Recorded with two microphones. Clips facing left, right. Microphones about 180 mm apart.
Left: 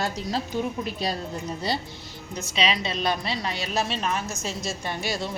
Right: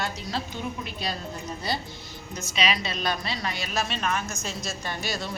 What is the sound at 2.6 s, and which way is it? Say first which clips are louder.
A woman's voice: left 2 dB; 25° left (ahead or behind).